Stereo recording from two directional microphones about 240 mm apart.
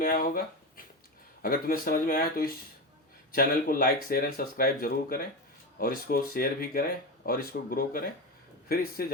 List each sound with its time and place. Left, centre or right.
0.0 s speech: left